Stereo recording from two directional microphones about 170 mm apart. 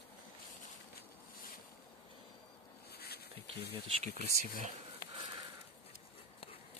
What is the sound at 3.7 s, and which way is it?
Speech, 35° right (ahead or behind).